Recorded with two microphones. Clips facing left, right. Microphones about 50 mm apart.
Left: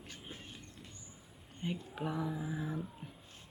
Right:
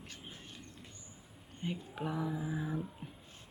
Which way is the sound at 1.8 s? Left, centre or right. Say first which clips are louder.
Right 1 dB; centre.